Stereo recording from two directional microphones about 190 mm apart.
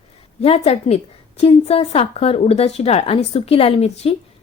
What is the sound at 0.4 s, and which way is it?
A woman's voice, 35° left (ahead or behind).